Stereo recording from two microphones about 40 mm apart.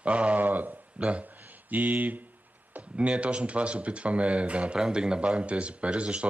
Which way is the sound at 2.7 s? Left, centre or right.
Right.